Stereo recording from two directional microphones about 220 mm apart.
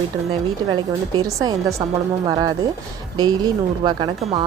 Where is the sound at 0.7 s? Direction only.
20° right (ahead or behind).